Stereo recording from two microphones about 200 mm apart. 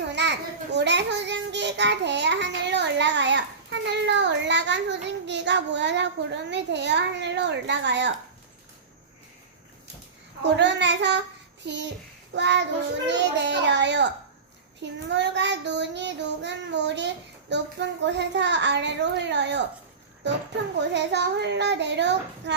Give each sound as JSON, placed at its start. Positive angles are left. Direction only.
{"t": 0.1, "sound": "a child's voice", "side_deg": -60}
{"t": 10.6, "sound": "child singing", "side_deg": -60}
{"t": 20.9, "sound": "child singing", "side_deg": -60}